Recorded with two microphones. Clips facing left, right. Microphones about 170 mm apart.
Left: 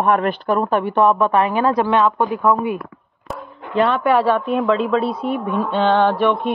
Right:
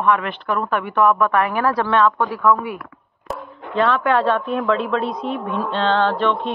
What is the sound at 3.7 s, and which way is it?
A man's voice, 5° left (ahead or behind).